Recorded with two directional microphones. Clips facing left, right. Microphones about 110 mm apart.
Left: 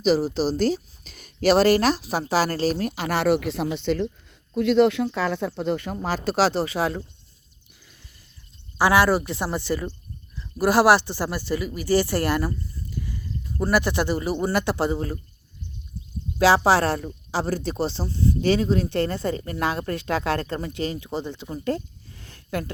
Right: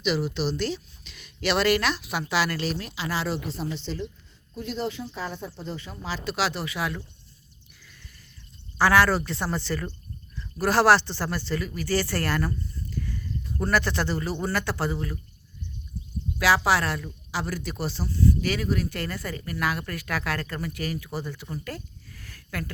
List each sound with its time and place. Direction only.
0.0 s speech: 40° left (ahead or behind); by 4.1 s 60° left (ahead or behind)
4.5 s speech: 75° left (ahead or behind); by 7.0 s 30° left (ahead or behind)
8.8 s speech: 15° left (ahead or behind)
16.4 s speech: 30° left (ahead or behind)